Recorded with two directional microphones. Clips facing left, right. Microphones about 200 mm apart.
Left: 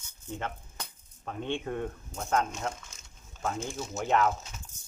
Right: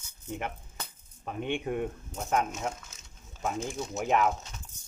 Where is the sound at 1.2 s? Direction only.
15° right (ahead or behind).